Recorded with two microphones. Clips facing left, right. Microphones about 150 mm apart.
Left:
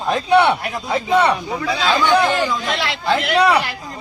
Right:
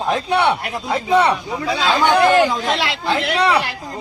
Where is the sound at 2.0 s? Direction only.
55° right (ahead or behind).